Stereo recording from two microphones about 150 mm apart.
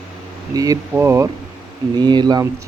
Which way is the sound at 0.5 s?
25° right (ahead or behind).